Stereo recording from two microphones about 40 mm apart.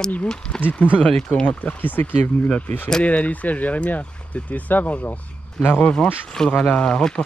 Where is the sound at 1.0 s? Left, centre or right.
Centre.